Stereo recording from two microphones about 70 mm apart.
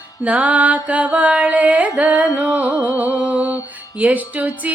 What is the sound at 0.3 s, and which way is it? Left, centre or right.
Music, right.